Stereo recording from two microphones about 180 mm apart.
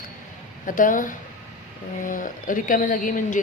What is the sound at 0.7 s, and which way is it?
A woman's voice, 50° left (ahead or behind).